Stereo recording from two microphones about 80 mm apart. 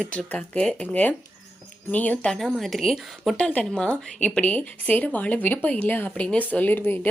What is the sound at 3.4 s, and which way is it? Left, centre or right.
A woman's voice, centre.